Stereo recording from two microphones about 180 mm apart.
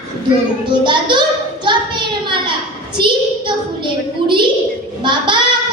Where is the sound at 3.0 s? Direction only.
25° right (ahead or behind).